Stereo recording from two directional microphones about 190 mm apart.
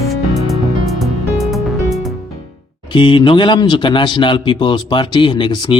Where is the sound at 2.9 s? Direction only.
25° left (ahead or behind).